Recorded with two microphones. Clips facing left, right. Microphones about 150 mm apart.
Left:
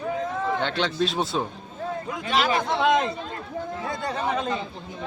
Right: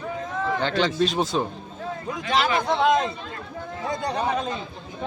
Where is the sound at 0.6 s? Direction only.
Centre (ahead or behind).